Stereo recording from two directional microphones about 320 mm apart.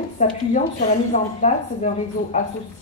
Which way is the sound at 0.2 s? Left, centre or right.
Left.